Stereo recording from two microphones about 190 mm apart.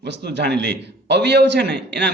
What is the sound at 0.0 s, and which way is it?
A man's voice, 60° right (ahead or behind).